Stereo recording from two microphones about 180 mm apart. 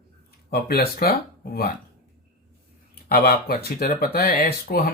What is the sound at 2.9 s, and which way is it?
Speech, 60° left (ahead or behind).